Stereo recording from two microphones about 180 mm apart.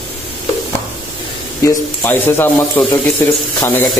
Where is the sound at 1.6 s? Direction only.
10° left (ahead or behind).